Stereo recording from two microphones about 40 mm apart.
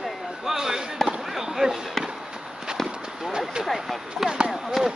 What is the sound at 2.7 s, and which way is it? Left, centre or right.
Clip-clop, centre.